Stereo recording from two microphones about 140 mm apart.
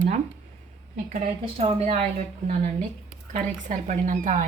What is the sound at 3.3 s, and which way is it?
Speech, 60° right (ahead or behind).